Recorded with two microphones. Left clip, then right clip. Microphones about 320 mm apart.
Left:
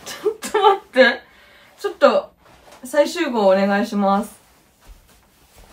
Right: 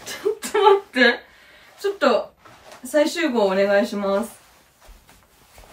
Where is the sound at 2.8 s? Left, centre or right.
Centre.